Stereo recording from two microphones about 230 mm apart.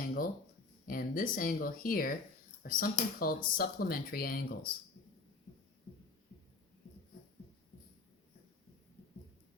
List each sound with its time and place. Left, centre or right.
0.9 s speech: left